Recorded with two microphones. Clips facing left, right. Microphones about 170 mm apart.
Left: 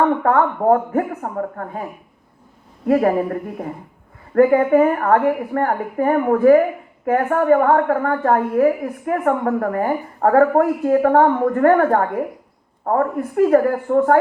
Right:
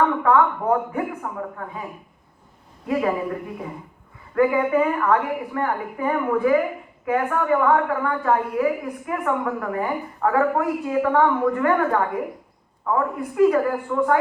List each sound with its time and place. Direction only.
0.2 s a woman's voice: 50° left (ahead or behind)
2.8 s a woman's voice: 50° left (ahead or behind)